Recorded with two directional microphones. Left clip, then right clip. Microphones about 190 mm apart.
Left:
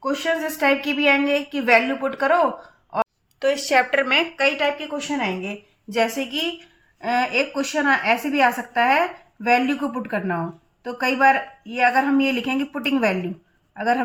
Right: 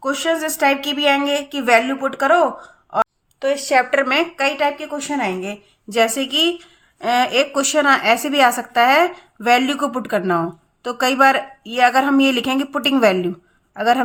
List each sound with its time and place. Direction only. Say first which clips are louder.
0.0 s a woman's voice: right 3 dB; 40° right (ahead or behind)
3.0 s speech: right 3 dB; 10° right (ahead or behind)
5.9 s speech: right 5 dB; 45° right (ahead or behind)